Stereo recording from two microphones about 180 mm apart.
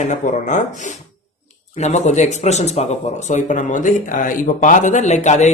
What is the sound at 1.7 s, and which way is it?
Speech, 40° left (ahead or behind).